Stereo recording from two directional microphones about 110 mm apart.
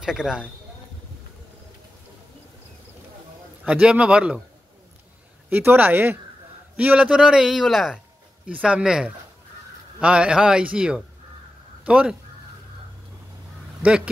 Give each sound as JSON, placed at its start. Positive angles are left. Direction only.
{"t": 0.0, "sound": "speech", "side_deg": -5}
{"t": 3.6, "sound": "speech", "side_deg": -10}
{"t": 5.5, "sound": "speech", "side_deg": -20}
{"t": 8.5, "sound": "speech", "side_deg": -10}
{"t": 13.8, "sound": "speech", "side_deg": -15}